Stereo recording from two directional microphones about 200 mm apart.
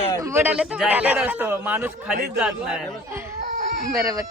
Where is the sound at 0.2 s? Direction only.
10° right (ahead or behind).